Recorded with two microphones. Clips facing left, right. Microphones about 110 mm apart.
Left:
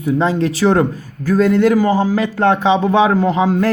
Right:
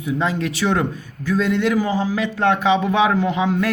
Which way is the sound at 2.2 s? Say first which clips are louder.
Left 4 dB; 35° left (ahead or behind).